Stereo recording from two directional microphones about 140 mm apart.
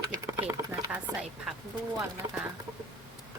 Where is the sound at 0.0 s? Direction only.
25° right (ahead or behind); by 1.5 s 5° right (ahead or behind).